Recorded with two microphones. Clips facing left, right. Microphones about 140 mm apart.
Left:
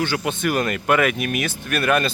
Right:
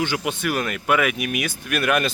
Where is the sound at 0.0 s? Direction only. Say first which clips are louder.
Left 1 dB; 15° right (ahead or behind).